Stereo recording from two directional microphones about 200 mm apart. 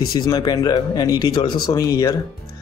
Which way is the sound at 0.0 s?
20° left (ahead or behind).